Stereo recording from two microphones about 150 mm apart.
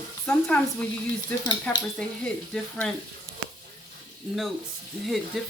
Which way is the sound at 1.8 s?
5° left (ahead or behind).